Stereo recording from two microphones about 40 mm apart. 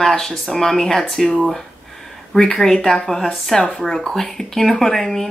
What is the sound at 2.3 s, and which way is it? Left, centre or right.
Speech, centre.